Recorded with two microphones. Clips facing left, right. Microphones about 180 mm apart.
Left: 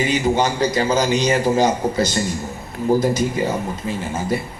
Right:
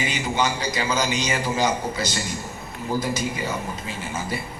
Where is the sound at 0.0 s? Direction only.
45° left (ahead or behind).